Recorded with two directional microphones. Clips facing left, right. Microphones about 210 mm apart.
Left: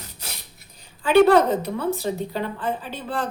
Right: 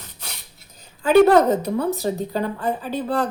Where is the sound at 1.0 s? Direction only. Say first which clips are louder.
Right 2 dB; 40° right (ahead or behind).